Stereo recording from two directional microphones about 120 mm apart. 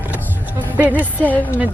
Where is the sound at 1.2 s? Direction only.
15° left (ahead or behind).